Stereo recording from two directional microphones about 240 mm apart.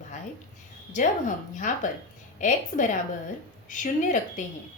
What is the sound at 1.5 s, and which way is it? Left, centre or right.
A woman's voice, left.